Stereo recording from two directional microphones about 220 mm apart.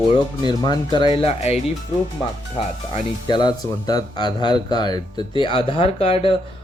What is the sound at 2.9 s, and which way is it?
Speech, 20° left (ahead or behind).